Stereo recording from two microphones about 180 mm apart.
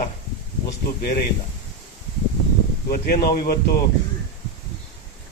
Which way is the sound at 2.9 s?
55° left (ahead or behind).